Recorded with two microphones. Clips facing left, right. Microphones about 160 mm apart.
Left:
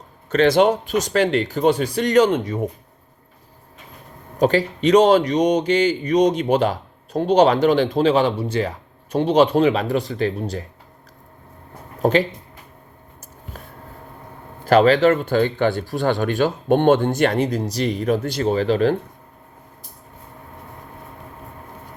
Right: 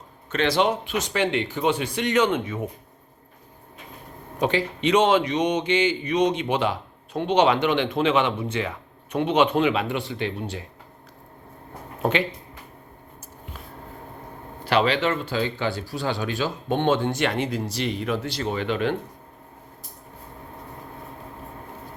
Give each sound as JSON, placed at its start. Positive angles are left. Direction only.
{"t": 0.3, "sound": "a man's voice", "side_deg": 45}
{"t": 4.4, "sound": "a man's voice", "side_deg": 40}
{"t": 14.6, "sound": "speech", "side_deg": 45}